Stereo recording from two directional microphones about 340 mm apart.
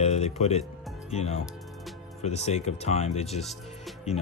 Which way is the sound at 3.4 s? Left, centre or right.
Centre.